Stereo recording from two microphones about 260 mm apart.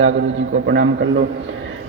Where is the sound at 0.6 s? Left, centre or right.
Right.